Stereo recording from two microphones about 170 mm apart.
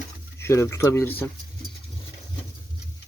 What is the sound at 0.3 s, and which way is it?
Speech, 15° left (ahead or behind).